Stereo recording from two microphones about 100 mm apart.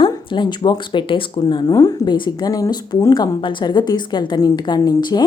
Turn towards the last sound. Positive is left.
turn(degrees=45)  # may be behind; listen again after turning